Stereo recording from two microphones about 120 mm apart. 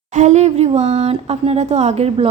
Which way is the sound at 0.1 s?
85° right.